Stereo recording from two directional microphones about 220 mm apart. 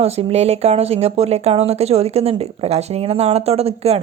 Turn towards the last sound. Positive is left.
turn(degrees=-30)  # may be behind; listen again after turning